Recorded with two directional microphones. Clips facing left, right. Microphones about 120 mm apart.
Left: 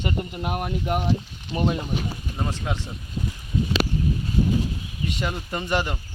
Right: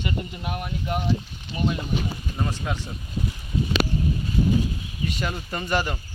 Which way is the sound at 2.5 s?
25° left (ahead or behind).